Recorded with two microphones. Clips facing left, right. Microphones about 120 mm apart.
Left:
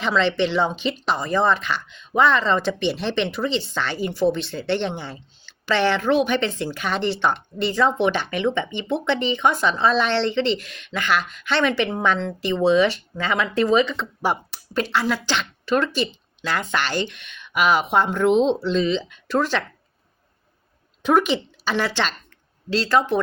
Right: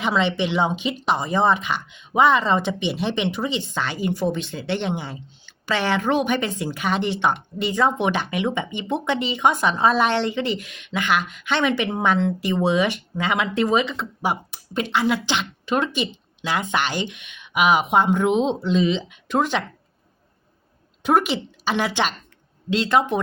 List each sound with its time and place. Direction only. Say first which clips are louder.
0.0 s a woman's voice: left 1 dB; 15° right (ahead or behind)
21.0 s a woman's voice: left 1 dB; 10° right (ahead or behind)